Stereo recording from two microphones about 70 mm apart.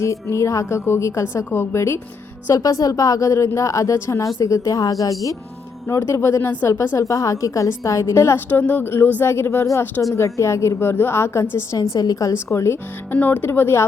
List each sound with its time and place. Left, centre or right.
0.0 s a woman's voice: left
2.5 s speech: left
5.9 s a woman's voice: left
8.4 s a woman's voice: left
11.8 s a woman's voice: left
12.3 s speech: left
13.1 s speech: left